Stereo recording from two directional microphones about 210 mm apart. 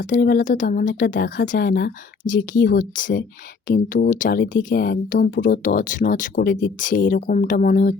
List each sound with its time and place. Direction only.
0.0 s speech: 40° left (ahead or behind)